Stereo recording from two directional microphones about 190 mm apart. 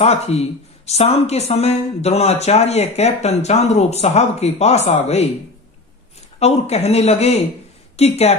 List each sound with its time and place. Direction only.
0.0 s speech: 35° left (ahead or behind)
6.4 s a woman's voice: 35° left (ahead or behind)